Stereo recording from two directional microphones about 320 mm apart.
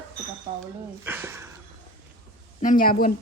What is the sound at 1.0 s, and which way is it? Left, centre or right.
Mantra, centre.